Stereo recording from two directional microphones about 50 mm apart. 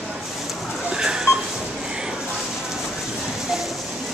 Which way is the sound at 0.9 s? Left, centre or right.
Centre.